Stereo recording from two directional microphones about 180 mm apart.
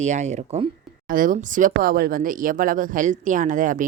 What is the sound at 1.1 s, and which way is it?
Speech, 50° right (ahead or behind).